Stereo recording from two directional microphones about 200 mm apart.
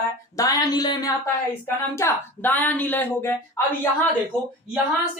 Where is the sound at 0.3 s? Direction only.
20° left (ahead or behind).